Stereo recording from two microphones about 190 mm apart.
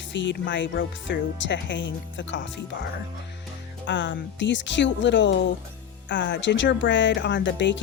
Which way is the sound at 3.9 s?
70° left (ahead or behind).